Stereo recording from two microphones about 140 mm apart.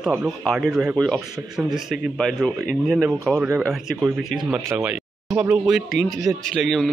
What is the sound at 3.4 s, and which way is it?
Speech, 15° right (ahead or behind).